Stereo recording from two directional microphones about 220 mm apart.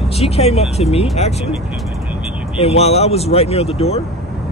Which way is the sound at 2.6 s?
30° left (ahead or behind).